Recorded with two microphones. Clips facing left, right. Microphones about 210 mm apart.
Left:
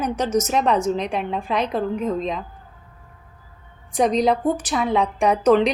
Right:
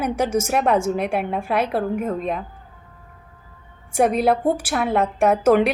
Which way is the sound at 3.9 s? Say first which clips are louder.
Right 1 dB; 5° right (ahead or behind).